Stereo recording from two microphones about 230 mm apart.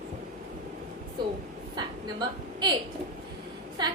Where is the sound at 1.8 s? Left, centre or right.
Centre.